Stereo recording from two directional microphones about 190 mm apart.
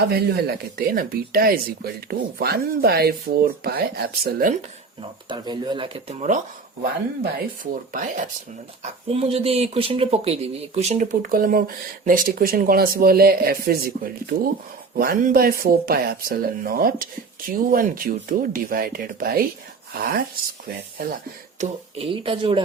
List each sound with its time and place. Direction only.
0.0 s speech: 55° right (ahead or behind)
5.3 s speech: 25° right (ahead or behind); by 8.3 s 45° right (ahead or behind)
8.8 s speech: 30° right (ahead or behind); by 21.2 s 50° right (ahead or behind)
21.6 s speech: 30° right (ahead or behind)